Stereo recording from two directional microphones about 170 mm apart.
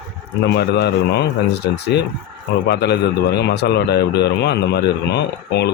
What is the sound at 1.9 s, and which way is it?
A man's voice, 80° left.